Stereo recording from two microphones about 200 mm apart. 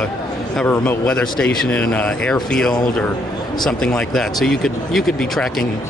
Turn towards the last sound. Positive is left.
turn(degrees=0)  # may be behind; listen again after turning